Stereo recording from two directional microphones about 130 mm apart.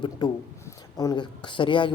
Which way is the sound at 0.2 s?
35° left (ahead or behind).